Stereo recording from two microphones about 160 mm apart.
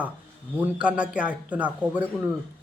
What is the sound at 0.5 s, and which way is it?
Speech, 10° right (ahead or behind).